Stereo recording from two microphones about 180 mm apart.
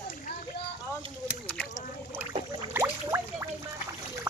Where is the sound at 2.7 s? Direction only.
15° right (ahead or behind).